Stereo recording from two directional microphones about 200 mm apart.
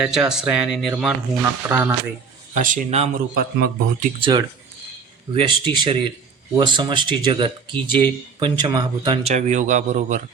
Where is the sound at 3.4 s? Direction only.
45° right (ahead or behind).